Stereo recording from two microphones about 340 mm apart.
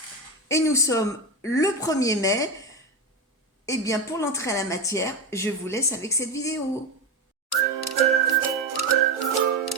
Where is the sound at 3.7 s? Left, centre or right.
Centre.